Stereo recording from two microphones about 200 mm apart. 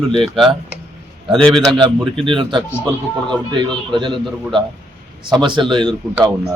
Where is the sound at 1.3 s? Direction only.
5° left (ahead or behind).